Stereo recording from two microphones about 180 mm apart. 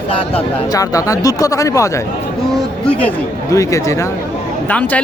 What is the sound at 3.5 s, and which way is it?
Speech, 15° left (ahead or behind).